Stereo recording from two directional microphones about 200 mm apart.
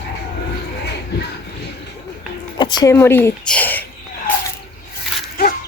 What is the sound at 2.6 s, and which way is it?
Speech, 20° left (ahead or behind).